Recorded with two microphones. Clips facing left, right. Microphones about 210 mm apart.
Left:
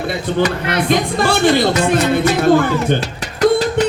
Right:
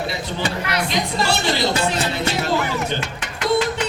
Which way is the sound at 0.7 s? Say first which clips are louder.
Left 7 dB; 55° left (ahead or behind).